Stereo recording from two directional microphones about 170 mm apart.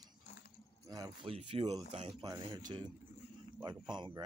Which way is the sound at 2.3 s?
25° right (ahead or behind).